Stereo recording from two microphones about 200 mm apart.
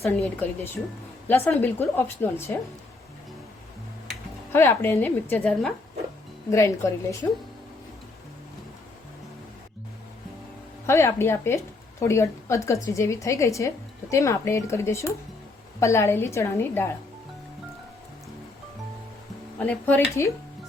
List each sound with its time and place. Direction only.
0.0 s a woman's voice: 10° left (ahead or behind)
4.1 s a woman's voice: 10° left (ahead or behind)
10.8 s a woman's voice: 10° left (ahead or behind)
19.5 s a woman's voice: 5° left (ahead or behind)